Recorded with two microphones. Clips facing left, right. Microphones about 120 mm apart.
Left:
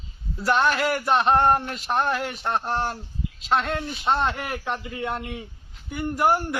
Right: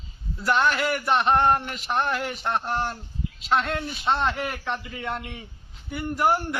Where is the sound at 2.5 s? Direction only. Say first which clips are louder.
Left 1 dB; 10° left (ahead or behind).